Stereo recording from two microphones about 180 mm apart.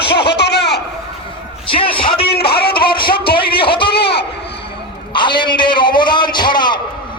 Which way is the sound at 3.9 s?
65° left (ahead or behind).